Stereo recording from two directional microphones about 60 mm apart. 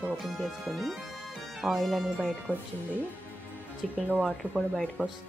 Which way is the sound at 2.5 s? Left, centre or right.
Left.